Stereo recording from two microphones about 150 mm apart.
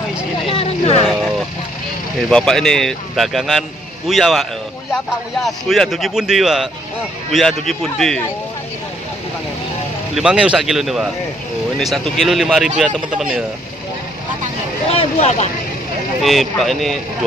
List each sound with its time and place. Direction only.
0.5 s vehicle: 45° left (ahead or behind)
2.2 s a man's voice: 5° left (ahead or behind)
10.1 s a man's voice: 5° right (ahead or behind)
15.0 s speech: 45° left (ahead or behind)
16.2 s a man's voice: centre (ahead or behind)